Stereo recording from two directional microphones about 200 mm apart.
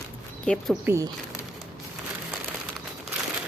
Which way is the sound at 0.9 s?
15° right (ahead or behind).